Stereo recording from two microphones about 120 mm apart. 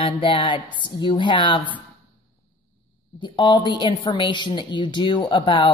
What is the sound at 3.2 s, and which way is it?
A woman's voice, 40° left (ahead or behind).